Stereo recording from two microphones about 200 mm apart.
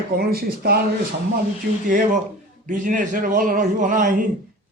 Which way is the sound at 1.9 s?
40° right (ahead or behind).